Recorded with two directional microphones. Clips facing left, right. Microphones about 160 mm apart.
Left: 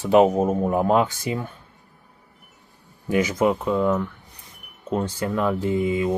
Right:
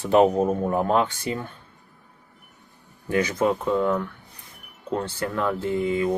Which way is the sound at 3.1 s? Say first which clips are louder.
Left 2 dB; 15° left (ahead or behind).